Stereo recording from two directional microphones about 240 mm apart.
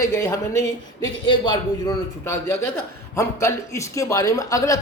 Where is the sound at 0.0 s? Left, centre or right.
Centre.